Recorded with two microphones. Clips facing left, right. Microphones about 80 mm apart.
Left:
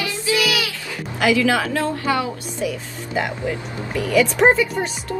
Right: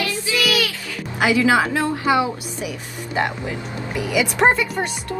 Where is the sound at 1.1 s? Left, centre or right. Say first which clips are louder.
Right 1 dB; centre.